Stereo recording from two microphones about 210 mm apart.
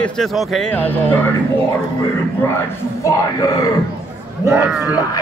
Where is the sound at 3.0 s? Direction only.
15° left (ahead or behind).